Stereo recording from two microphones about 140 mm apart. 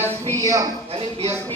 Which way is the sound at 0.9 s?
45° right (ahead or behind).